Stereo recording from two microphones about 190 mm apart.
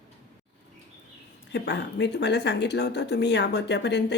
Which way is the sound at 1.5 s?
65° left (ahead or behind).